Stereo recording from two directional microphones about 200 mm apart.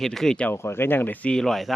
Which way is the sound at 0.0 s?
Centre (ahead or behind).